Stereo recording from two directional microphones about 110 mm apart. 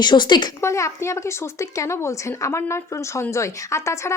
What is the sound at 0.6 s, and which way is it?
A woman's voice, 25° left (ahead or behind).